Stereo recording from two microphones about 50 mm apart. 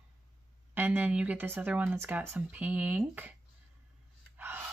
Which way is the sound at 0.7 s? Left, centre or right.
Right.